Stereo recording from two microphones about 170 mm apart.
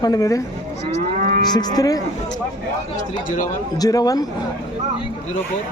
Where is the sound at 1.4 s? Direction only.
25° left (ahead or behind).